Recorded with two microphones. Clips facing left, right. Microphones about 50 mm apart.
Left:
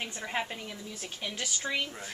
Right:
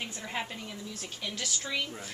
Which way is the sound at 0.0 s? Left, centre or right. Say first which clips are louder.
Left 2 dB; centre.